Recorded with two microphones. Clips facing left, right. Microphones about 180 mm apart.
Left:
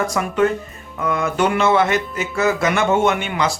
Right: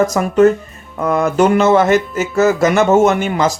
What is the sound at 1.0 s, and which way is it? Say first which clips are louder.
Music: right 6 dB; 45° right (ahead or behind).